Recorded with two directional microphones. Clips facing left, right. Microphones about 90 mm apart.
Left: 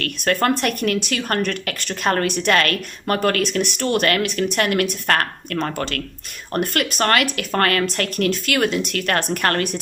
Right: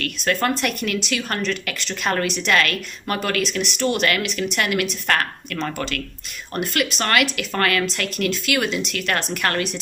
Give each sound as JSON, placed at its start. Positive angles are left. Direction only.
{"t": 0.4, "sound": "speech", "side_deg": 50}